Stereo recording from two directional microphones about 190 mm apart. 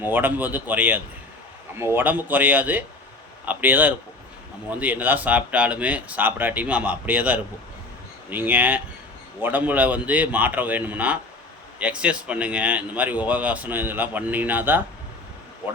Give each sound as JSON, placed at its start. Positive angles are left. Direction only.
{"t": 0.0, "sound": "speech", "side_deg": -10}